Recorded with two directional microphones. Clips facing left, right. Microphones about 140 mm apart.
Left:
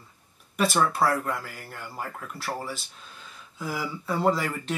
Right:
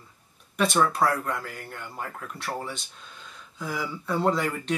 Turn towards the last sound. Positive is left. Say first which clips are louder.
# even
turn(degrees=0)  # may be behind; listen again after turning